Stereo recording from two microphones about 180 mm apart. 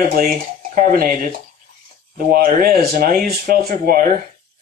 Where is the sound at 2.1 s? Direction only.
55° right (ahead or behind).